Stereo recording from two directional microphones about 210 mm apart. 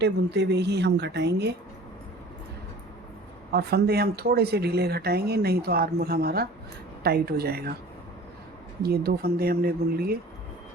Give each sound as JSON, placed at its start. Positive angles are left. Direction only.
{"t": 0.0, "sound": "speech", "side_deg": -55}
{"t": 3.5, "sound": "speech", "side_deg": -50}
{"t": 8.8, "sound": "speech", "side_deg": -45}